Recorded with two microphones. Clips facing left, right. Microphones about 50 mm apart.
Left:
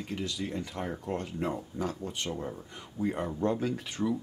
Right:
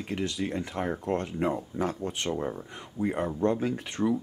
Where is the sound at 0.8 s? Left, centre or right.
Centre.